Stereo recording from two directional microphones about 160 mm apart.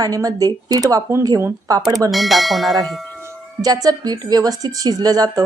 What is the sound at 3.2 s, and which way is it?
Speech, 20° right (ahead or behind).